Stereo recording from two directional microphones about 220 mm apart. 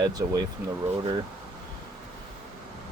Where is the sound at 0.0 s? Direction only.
15° right (ahead or behind).